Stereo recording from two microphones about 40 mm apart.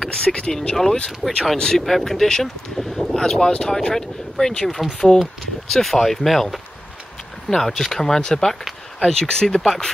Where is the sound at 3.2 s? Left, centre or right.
Centre.